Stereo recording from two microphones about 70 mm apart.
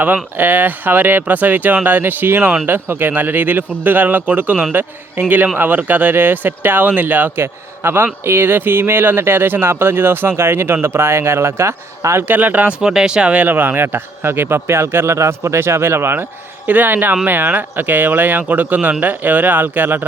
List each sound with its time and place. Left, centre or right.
0.0 s speech: right
12.3 s speech: right
12.8 s speech: centre
13.5 s speech: right
16.6 s speech: right